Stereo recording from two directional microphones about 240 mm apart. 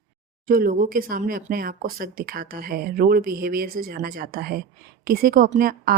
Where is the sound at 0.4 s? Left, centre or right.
Right.